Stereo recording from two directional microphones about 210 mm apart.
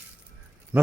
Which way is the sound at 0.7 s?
5° right (ahead or behind).